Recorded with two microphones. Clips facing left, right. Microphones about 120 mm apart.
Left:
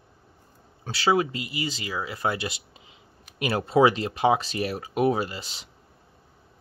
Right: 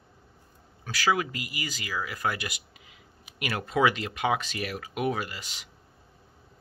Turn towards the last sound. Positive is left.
turn(degrees=30)  # may be behind; listen again after turning